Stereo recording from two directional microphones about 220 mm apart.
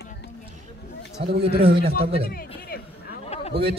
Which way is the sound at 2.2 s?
45° left (ahead or behind).